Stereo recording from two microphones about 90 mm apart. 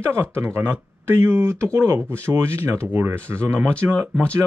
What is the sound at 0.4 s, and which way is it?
Speech, 25° right (ahead or behind).